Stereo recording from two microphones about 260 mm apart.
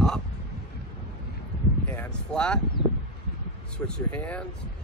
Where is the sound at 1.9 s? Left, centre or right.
Centre.